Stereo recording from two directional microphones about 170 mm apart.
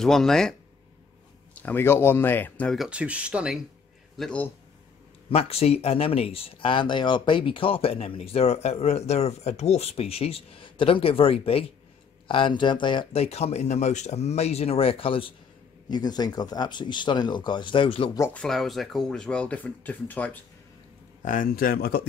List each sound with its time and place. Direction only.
0.0 s speech: 5° left (ahead or behind)
4.2 s speech: 5° left (ahead or behind)
5.3 s speech: 35° left (ahead or behind)
18.3 s speech: 5° left (ahead or behind)
21.2 s speech: 50° left (ahead or behind)